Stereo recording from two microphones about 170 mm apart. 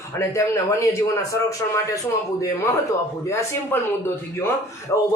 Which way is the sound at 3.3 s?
15° left (ahead or behind).